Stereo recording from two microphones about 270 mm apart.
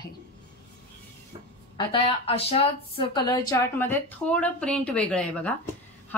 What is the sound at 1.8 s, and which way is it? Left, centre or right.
Speech, left.